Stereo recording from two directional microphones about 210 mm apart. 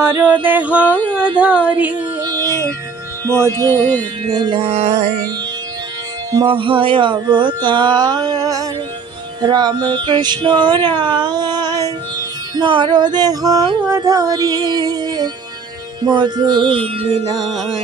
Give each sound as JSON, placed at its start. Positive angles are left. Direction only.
{"t": 0.0, "sound": "a sound", "side_deg": -10}
{"t": 2.2, "sound": "music", "side_deg": -15}
{"t": 3.3, "sound": "a sound", "side_deg": -15}
{"t": 4.3, "sound": "music", "side_deg": -20}
{"t": 6.3, "sound": "music", "side_deg": -25}
{"t": 17.4, "sound": "music", "side_deg": 0}